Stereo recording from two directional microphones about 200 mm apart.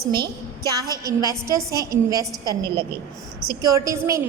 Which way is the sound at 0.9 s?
15° right (ahead or behind).